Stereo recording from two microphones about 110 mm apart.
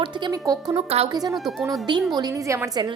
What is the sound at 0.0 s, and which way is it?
Speech, 35° right (ahead or behind).